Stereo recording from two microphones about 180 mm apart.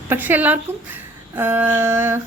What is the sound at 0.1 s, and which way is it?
A woman's voice, 10° right (ahead or behind).